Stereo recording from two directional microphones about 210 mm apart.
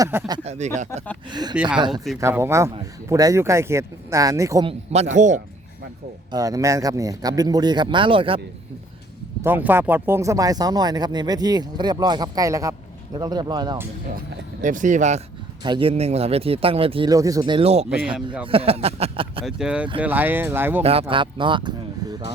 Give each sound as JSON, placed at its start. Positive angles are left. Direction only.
{"t": 0.0, "sound": "speech", "side_deg": -15}
{"t": 0.3, "sound": "speech", "side_deg": -30}
{"t": 1.3, "sound": "speech", "side_deg": -20}
{"t": 4.9, "sound": "speech", "side_deg": -35}
{"t": 6.3, "sound": "speech", "side_deg": -15}
{"t": 9.4, "sound": "speech", "side_deg": -10}
{"t": 14.6, "sound": "speech", "side_deg": -35}
{"t": 15.6, "sound": "speech", "side_deg": -25}
{"t": 19.5, "sound": "speech", "side_deg": -5}
{"t": 21.0, "sound": "speech", "side_deg": -25}